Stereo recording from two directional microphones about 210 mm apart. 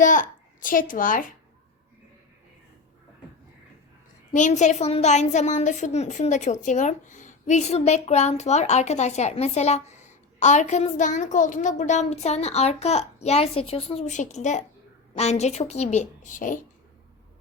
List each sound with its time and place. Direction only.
0.0 s a child's voice: 40° left (ahead or behind)
4.3 s a woman's voice: 35° left (ahead or behind)